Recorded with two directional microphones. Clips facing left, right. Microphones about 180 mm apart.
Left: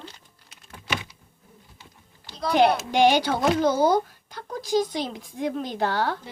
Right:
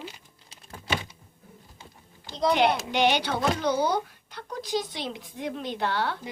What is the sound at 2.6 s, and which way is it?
Speech, 40° left (ahead or behind).